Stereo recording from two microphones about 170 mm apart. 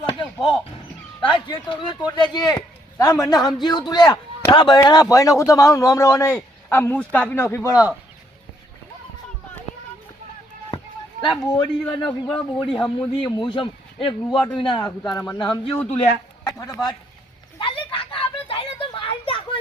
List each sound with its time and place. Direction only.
0.0 s basketball bounce: 25° left (ahead or behind)
1.2 s a man's voice: 30° left (ahead or behind)
11.3 s a man's voice: 25° left (ahead or behind)
12.8 s a man's voice: 10° left (ahead or behind)
13.3 s a man's voice: 30° left (ahead or behind)
16.5 s speech: 20° left (ahead or behind)
17.6 s a sound: 30° left (ahead or behind)